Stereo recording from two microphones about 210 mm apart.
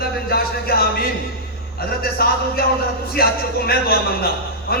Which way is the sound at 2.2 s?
45° left (ahead or behind).